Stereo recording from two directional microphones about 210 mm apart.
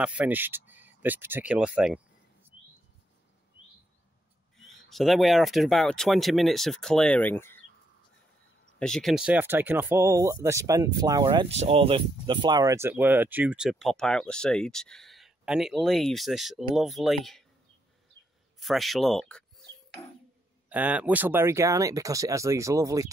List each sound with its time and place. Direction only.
0.0 s speech: 5° right (ahead or behind)
4.8 s speech: centre (ahead or behind)
8.7 s speech: 5° left (ahead or behind)
18.2 s a sound: 60° right (ahead or behind)
18.6 s speech: centre (ahead or behind)
20.7 s speech: 5° right (ahead or behind)